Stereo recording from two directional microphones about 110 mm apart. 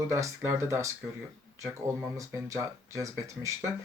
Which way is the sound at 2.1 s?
30° right (ahead or behind).